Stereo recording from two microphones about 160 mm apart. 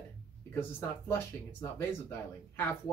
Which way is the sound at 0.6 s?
15° left (ahead or behind).